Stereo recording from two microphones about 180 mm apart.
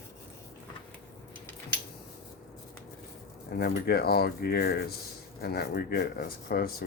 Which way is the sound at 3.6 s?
60° left (ahead or behind).